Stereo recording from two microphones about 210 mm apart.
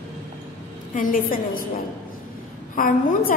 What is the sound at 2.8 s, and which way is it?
Speech, 40° left (ahead or behind).